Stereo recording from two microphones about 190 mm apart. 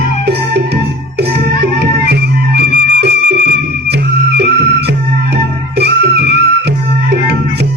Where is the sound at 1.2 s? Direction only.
60° right (ahead or behind).